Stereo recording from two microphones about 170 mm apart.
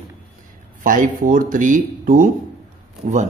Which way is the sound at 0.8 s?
50° right (ahead or behind).